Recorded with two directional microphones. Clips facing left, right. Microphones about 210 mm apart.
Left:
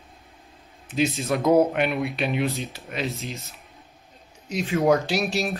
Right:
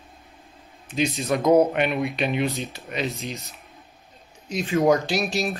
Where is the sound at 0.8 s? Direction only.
5° left (ahead or behind).